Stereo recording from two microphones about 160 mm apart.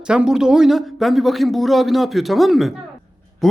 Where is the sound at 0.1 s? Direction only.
5° right (ahead or behind).